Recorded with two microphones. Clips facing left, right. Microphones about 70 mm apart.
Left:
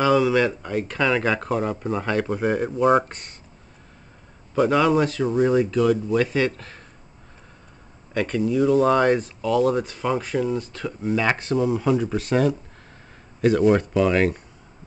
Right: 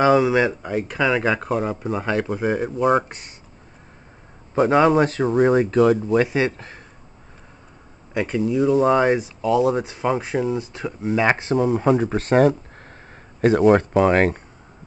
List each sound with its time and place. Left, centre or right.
0.0 s speech: right; by 3.3 s centre
4.6 s speech: right
6.2 s speech: right
8.1 s speech: centre
11.6 s speech: right